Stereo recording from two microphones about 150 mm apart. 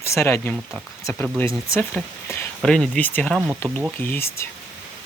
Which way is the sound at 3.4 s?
15° right (ahead or behind).